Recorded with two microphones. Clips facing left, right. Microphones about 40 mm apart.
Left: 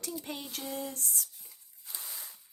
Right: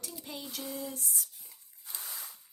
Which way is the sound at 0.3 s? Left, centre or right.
Left.